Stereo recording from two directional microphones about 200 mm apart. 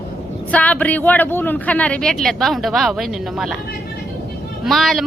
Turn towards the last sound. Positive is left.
turn(degrees=0)  # may be behind; listen again after turning